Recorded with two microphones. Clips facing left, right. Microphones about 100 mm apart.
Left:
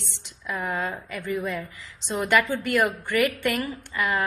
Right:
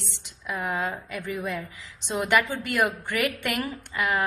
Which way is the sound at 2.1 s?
15° right (ahead or behind).